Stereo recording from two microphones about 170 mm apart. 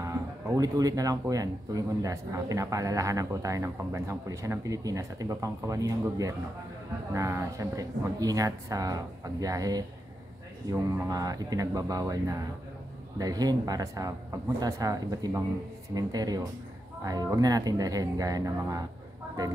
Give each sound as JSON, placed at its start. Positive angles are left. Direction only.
{"t": 0.0, "sound": "speech", "side_deg": -20}